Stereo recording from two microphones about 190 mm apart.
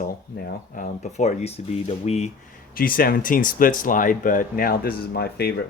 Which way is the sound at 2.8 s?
50° left (ahead or behind).